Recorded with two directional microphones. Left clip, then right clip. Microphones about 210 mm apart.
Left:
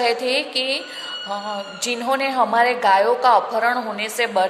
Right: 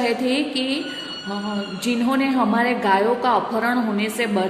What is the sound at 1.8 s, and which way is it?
A woman's voice, 20° left (ahead or behind).